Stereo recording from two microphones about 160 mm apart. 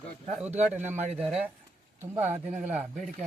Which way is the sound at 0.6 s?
10° right (ahead or behind).